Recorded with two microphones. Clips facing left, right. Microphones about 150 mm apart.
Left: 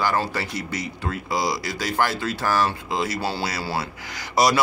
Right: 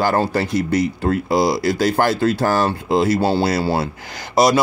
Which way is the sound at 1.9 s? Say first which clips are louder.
Right 2 dB; 30° right (ahead or behind).